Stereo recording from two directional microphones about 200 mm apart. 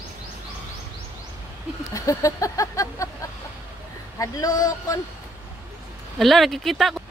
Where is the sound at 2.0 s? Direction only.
15° left (ahead or behind).